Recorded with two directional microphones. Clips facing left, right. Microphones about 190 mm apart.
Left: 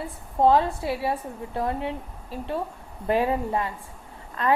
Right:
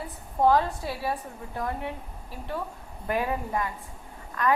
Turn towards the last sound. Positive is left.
turn(degrees=25)  # may be behind; listen again after turning